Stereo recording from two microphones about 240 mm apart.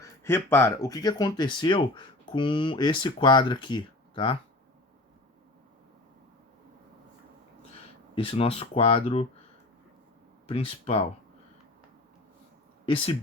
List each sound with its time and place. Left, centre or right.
0.3 s speech: centre
8.1 s speech: left
10.5 s speech: left
12.8 s speech: left